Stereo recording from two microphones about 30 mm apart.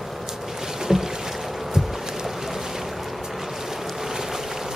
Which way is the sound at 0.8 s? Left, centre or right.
Centre.